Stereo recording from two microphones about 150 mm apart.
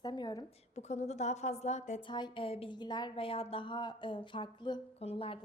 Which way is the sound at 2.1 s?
35° left (ahead or behind).